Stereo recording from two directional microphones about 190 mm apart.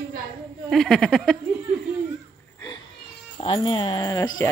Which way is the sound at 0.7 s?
Centre (ahead or behind).